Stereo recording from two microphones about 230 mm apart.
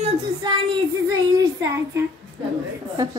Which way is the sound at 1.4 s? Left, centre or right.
Centre.